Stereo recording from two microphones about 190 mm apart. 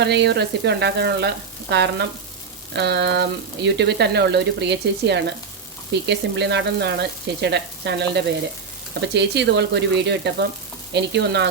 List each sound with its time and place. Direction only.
0.0 s speech: 65° right (ahead or behind)